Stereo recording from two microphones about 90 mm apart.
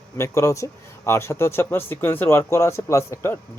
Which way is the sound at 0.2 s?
35° left (ahead or behind).